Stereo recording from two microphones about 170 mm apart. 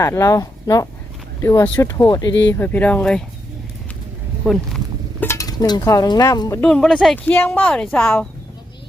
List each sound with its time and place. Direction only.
0.0 s speech: 20° left (ahead or behind)
2.5 s speech: 10° left (ahead or behind)
4.4 s a woman's voice: 5° right (ahead or behind)
5.2 s a sound: 15° left (ahead or behind)
6.6 s a woman's voice: 5° left (ahead or behind)